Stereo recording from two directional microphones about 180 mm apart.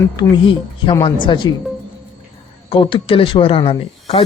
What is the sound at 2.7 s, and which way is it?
Speech, 30° left (ahead or behind).